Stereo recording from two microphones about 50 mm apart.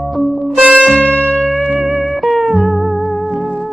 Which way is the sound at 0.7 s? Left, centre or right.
Centre.